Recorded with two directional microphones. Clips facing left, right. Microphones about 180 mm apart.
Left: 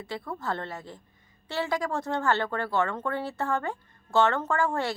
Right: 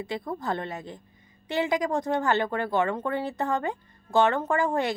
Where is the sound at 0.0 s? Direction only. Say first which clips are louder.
Right 3 dB; 20° right (ahead or behind).